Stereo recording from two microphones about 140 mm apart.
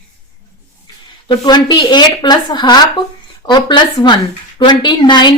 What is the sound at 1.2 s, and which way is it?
Speech, 30° left (ahead or behind).